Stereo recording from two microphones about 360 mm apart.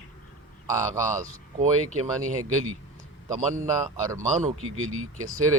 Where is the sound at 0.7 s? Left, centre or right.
Centre.